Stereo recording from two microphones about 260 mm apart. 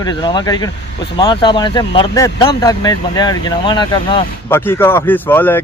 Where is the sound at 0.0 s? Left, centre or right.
Centre.